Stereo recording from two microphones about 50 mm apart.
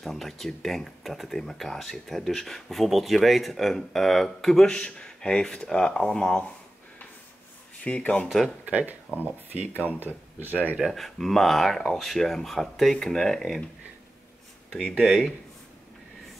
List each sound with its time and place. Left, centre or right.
0.0 s speech: centre
4.6 s speech: centre
7.8 s speech: left
8.3 s speech: centre
8.6 s speech: right
10.8 s speech: centre
15.0 s speech: centre